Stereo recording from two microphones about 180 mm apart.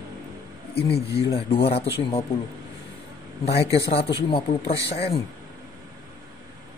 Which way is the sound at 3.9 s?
35° left (ahead or behind).